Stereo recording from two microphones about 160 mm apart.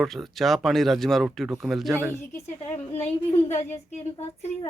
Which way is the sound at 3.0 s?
40° left (ahead or behind).